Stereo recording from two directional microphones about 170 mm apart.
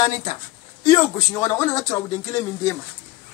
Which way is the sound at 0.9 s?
20° left (ahead or behind).